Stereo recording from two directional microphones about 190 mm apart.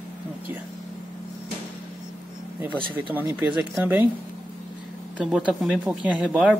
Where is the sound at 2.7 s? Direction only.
25° right (ahead or behind).